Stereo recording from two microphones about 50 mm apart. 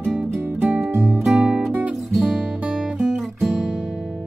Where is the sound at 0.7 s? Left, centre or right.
Right.